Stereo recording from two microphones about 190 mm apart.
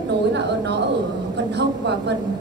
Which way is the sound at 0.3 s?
65° right (ahead or behind).